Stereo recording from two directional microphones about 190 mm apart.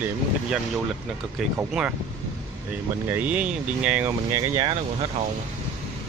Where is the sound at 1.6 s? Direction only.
5° right (ahead or behind).